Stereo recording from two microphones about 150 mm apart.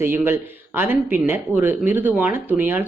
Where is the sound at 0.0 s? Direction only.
15° right (ahead or behind).